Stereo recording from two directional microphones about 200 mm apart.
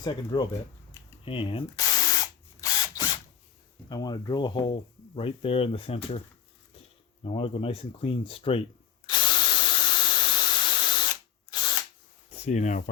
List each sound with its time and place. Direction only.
0.0 s speech: 20° left (ahead or behind)
2.2 s drill: 20° left (ahead or behind)
3.8 s speech: 20° left (ahead or behind)
7.3 s speech: 30° left (ahead or behind)
9.0 s drill: 25° left (ahead or behind)
12.3 s speech: 35° left (ahead or behind)